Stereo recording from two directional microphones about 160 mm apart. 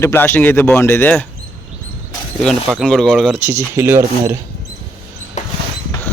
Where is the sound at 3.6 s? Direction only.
15° right (ahead or behind).